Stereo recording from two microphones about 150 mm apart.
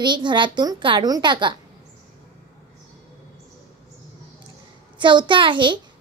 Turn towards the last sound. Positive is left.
turn(degrees=-35)  # may be behind; listen again after turning